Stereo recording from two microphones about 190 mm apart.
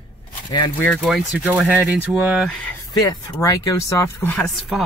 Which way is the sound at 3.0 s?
20° left (ahead or behind).